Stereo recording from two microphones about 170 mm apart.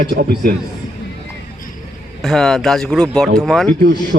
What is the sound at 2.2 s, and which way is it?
Speech, centre (ahead or behind).